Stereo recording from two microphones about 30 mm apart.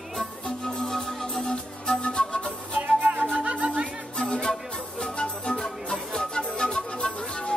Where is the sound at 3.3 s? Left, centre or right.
Right.